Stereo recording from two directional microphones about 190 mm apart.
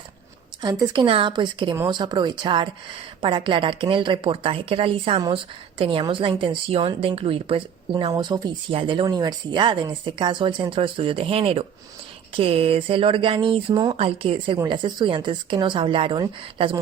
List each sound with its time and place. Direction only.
0.6 s a woman's voice: 20° right (ahead or behind)